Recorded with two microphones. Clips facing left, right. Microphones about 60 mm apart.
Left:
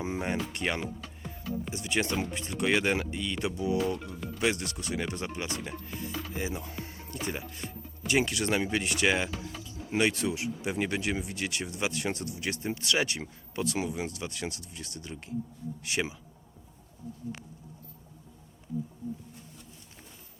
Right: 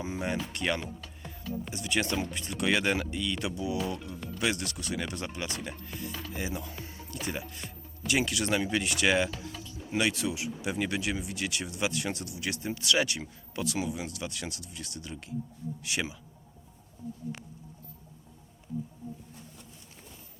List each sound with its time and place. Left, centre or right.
0.0 s music: left
0.3 s speech: left
4.4 s speech: left
5.6 s speech: centre
6.3 s speech: left
9.1 s speech: centre
9.9 s speech: left